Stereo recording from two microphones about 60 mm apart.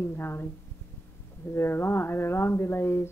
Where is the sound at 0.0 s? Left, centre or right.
Left.